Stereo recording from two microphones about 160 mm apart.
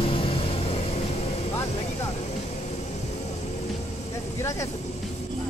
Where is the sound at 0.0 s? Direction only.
35° left (ahead or behind).